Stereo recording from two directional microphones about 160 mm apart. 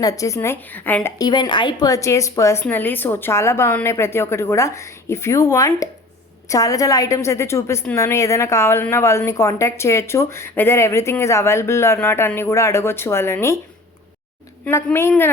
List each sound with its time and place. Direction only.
0.0 s a woman's voice: 20° left (ahead or behind)
1.2 s a woman's voice: 25° left (ahead or behind)
14.6 s a woman's voice: 15° left (ahead or behind)